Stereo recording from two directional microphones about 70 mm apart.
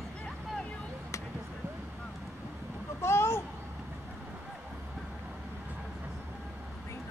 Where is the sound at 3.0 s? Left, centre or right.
Left.